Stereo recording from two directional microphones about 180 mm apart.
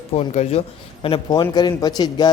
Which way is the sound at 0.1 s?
35° left (ahead or behind).